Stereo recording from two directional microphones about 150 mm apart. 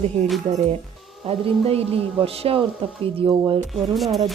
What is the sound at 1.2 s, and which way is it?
Speech, 40° right (ahead or behind).